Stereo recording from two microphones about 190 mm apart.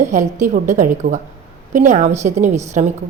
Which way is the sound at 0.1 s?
40° right (ahead or behind).